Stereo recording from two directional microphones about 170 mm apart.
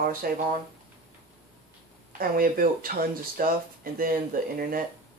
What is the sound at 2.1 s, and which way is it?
Speech, 60° right (ahead or behind).